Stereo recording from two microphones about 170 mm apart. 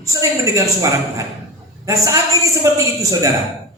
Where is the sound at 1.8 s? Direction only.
20° right (ahead or behind).